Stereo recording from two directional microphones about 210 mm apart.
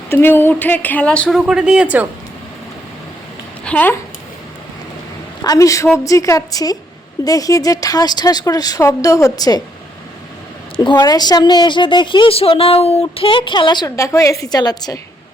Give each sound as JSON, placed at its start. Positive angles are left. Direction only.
{"t": 0.1, "sound": "a woman's voice", "side_deg": 10}
{"t": 3.6, "sound": "speech", "side_deg": 5}
{"t": 5.4, "sound": "a woman's voice", "side_deg": 15}
{"t": 10.8, "sound": "a woman's voice", "side_deg": 20}